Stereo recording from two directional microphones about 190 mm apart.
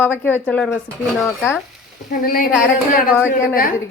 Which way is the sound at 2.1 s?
50° left (ahead or behind).